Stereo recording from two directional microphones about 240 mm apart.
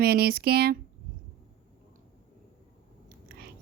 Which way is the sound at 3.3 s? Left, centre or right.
Right.